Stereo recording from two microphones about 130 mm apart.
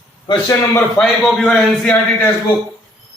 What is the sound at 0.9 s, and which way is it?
A man's voice, 5° left (ahead or behind).